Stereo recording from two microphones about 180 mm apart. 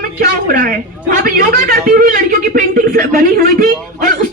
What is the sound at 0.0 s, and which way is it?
A man's voice, 50° right (ahead or behind).